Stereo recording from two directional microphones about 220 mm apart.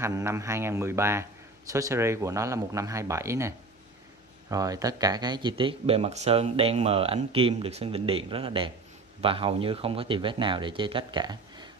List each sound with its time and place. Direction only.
0.0 s speech: 10° right (ahead or behind)